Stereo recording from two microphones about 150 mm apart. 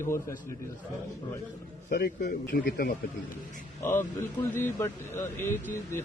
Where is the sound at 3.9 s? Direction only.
15° left (ahead or behind).